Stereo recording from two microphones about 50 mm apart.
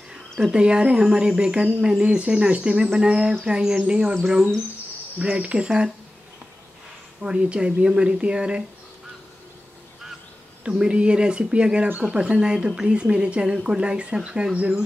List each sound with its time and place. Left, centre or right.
0.1 s speech: centre
5.4 s speech: centre
7.2 s speech: right
10.6 s speech: centre